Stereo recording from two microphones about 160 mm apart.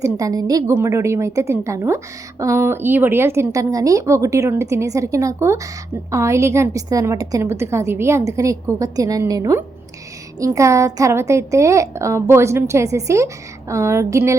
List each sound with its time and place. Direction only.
0.0 s a woman's voice: 20° right (ahead or behind)